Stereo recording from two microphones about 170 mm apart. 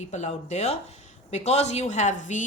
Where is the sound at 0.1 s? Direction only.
40° left (ahead or behind).